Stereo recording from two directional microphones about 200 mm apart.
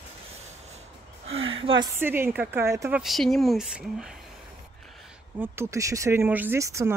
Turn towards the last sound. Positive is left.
turn(degrees=-15)  # may be behind; listen again after turning